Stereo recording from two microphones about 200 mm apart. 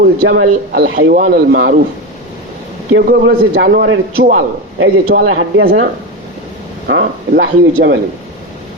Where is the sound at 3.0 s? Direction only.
55° right (ahead or behind).